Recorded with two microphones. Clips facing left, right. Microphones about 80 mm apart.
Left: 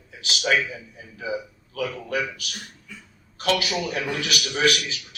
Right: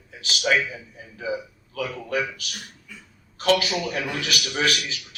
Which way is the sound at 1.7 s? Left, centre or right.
Right.